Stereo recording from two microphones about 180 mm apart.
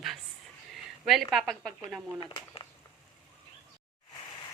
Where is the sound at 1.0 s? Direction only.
Centre (ahead or behind).